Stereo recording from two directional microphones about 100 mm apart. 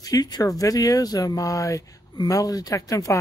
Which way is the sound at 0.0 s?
40° left (ahead or behind).